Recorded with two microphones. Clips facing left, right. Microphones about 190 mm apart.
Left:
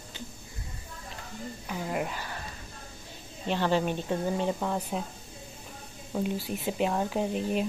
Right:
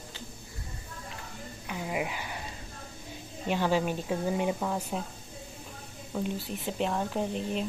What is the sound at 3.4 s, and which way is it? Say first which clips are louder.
Speech: left 1 dB; 10° right (ahead or behind).